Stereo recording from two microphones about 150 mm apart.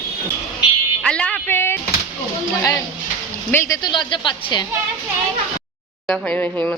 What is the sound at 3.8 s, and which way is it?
Speech, 30° left (ahead or behind).